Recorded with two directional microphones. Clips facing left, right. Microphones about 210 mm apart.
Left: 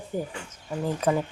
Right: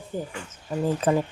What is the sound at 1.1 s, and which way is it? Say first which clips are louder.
Speech: right 1 dB; centre (ahead or behind).